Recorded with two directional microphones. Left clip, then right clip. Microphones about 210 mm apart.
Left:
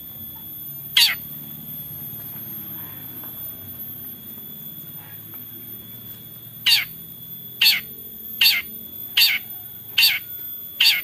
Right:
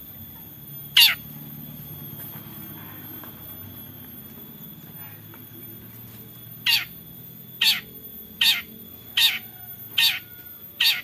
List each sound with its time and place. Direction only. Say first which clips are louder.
0.9 s bird: right 1 dB; centre (ahead or behind)
6.6 s squawk: left 4 dB; 20° left (ahead or behind)
7.5 s cat: left 4 dB; 20° left (ahead or behind)
10.8 s bird: left 4 dB; 20° left (ahead or behind)